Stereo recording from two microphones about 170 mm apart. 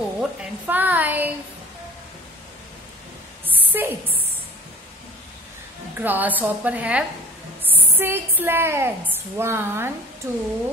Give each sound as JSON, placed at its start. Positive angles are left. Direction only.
{"t": 0.2, "sound": "a woman's voice", "side_deg": -5}
{"t": 3.4, "sound": "a sound", "side_deg": -10}
{"t": 5.9, "sound": "a woman's voice", "side_deg": -10}